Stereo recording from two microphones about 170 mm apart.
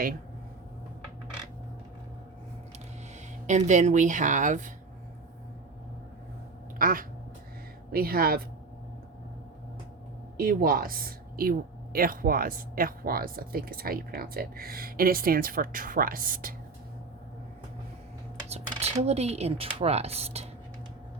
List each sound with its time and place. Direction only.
3.4 s speech: 45° right (ahead or behind)
6.7 s quack: 55° right (ahead or behind)
7.9 s speech: 65° right (ahead or behind)
10.3 s speech: 60° right (ahead or behind)
18.4 s cutlery: 35° right (ahead or behind)
19.0 s speech: 40° right (ahead or behind)